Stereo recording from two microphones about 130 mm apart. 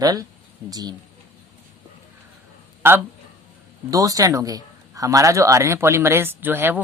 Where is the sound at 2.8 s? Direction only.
15° right (ahead or behind).